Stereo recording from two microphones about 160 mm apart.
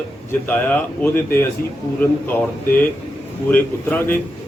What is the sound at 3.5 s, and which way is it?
Speech, 10° left (ahead or behind).